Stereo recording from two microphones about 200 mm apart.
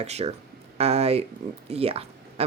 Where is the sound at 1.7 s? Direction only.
30° right (ahead or behind).